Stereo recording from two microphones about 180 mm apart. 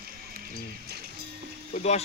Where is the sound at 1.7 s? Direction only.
40° left (ahead or behind).